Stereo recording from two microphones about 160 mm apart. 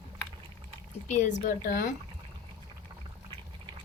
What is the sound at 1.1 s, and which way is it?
Speech, 45° left (ahead or behind).